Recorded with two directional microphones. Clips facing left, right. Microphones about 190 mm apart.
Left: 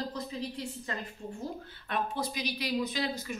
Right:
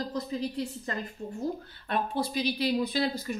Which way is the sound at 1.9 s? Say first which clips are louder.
Right 4 dB; 30° right (ahead or behind).